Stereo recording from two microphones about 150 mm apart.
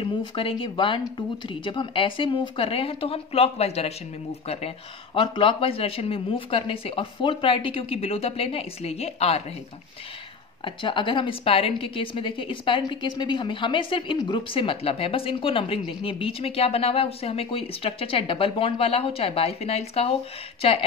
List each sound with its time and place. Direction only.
0.0 s a woman's voice: 35° left (ahead or behind)
10.6 s a woman's voice: 35° left (ahead or behind)